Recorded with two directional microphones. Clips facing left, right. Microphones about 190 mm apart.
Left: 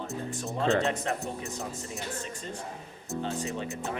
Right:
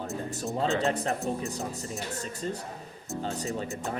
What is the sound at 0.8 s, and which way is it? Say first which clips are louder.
Speech: right 2 dB; 35° right (ahead or behind).